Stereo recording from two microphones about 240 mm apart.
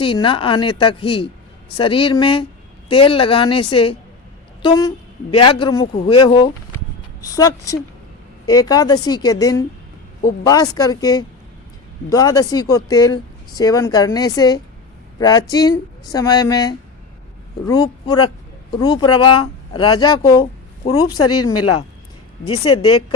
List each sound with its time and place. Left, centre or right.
0.0 s a woman's voice: left
21.2 s speech: left